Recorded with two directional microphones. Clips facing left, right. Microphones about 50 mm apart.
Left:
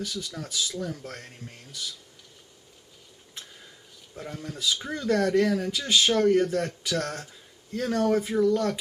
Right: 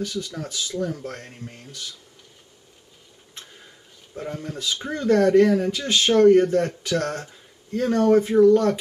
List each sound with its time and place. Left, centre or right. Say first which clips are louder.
0.0 s speech: right 5 dB; centre
4.1 s speech: right 6 dB; centre